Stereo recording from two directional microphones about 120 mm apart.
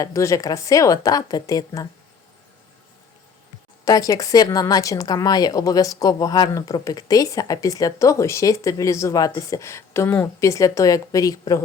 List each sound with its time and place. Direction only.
0.0 s speech: 25° left (ahead or behind)
3.8 s speech: 30° left (ahead or behind)